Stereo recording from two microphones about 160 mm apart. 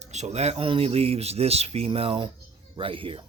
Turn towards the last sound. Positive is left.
turn(degrees=-35)  # may be behind; listen again after turning